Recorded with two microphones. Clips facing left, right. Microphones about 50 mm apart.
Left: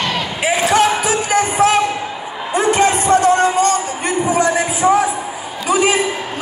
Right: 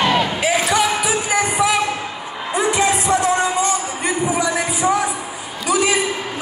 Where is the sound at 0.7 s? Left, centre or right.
Left.